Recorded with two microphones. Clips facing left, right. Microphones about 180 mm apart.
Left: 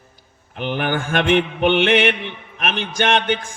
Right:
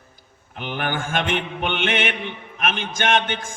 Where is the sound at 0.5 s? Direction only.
55° left (ahead or behind).